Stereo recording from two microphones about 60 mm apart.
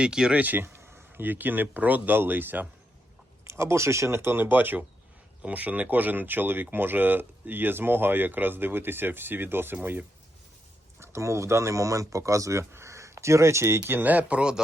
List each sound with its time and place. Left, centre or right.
0.0 s speech: centre
0.3 s speech: right
3.4 s speech: right
11.0 s speech: right; by 14.6 s centre